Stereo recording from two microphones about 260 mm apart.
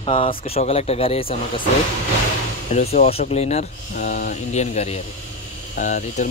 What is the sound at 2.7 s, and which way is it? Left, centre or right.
Speech, left.